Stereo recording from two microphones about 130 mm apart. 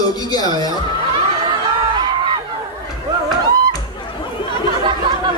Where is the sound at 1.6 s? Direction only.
35° right (ahead or behind).